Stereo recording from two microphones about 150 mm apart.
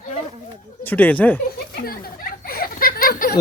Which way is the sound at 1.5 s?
90° left.